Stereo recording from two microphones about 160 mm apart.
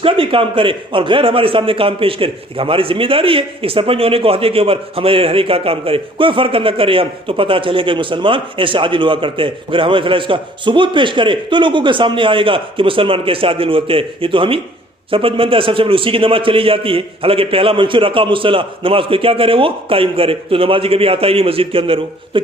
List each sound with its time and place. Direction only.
0.0 s a man's voice: 35° right (ahead or behind)